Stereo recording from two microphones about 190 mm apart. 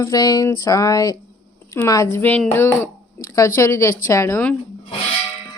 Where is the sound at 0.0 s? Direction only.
20° left (ahead or behind).